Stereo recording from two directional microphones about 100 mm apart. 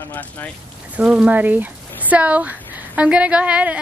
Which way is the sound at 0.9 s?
10° right (ahead or behind).